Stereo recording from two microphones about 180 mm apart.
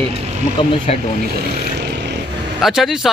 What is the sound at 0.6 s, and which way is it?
Speech, 30° left (ahead or behind).